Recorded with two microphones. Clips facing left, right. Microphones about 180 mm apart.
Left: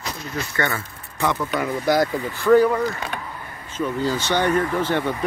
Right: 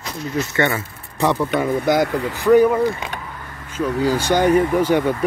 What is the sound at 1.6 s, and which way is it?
Speech, 20° right (ahead or behind).